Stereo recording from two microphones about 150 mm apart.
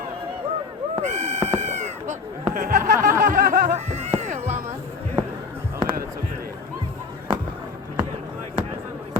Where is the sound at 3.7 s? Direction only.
50° right (ahead or behind).